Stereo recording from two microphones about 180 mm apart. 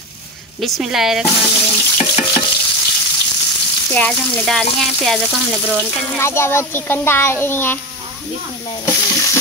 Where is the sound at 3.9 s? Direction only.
5° left (ahead or behind).